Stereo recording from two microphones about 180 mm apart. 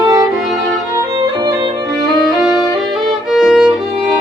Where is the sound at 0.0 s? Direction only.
20° right (ahead or behind).